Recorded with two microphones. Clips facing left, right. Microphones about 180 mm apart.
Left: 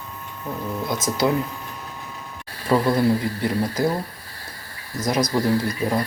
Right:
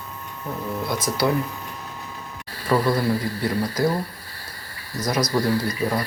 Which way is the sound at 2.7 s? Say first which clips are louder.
Left 2 dB; 20° left (ahead or behind).